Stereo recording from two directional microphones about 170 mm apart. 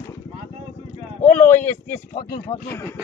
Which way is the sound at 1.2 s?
10° left (ahead or behind).